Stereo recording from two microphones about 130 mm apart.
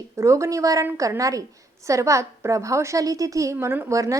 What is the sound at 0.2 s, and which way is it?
A woman's voice, 25° right (ahead or behind).